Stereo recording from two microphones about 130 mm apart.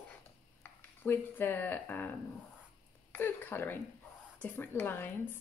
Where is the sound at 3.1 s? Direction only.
15° left (ahead or behind).